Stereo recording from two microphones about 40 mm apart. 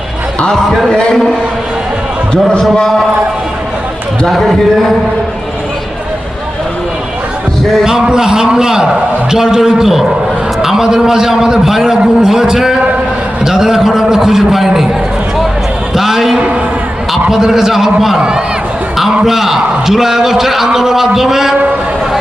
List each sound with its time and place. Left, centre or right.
0.9 s a man's voice: left
2.3 s a man's voice: left
4.3 s a man's voice: centre
8.0 s a man's voice: centre
16.0 s a sound: centre
17.2 s a man's voice: centre
18.2 s speech: right
18.9 s a man's voice: centre